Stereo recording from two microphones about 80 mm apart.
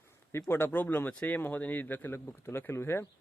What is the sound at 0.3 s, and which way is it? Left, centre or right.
Speech, left.